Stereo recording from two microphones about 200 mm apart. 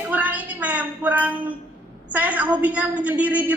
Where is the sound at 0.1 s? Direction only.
10° right (ahead or behind).